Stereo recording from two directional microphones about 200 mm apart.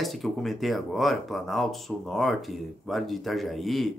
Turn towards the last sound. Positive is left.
turn(degrees=0)  # may be behind; listen again after turning